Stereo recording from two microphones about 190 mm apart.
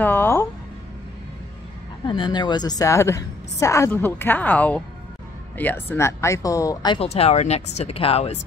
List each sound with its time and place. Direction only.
0.0 s music: 10° left (ahead or behind)
2.0 s a woman's voice: 25° left (ahead or behind)